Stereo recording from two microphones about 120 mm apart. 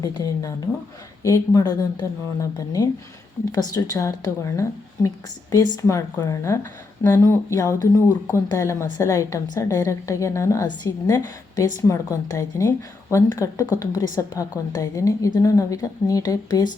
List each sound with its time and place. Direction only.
0.0 s a woman's voice: 35° left (ahead or behind)
11.8 s a woman's voice: 25° left (ahead or behind)